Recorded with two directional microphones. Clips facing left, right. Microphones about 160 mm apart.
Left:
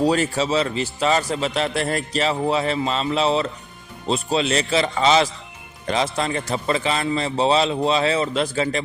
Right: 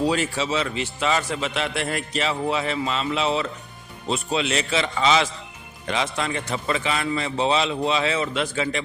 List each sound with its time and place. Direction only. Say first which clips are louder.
0.0 s a man's voice: left 3 dB; 40° left (ahead or behind)